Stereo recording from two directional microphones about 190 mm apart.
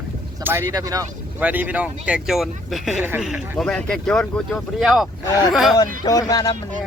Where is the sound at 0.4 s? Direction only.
15° right (ahead or behind).